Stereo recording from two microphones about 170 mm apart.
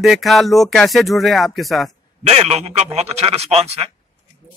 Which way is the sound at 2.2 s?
40° right (ahead or behind).